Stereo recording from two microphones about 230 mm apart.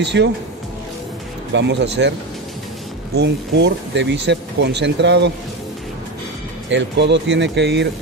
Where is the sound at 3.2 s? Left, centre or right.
Right.